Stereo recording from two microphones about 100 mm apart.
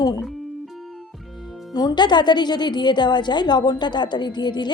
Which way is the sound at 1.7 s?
45° left (ahead or behind).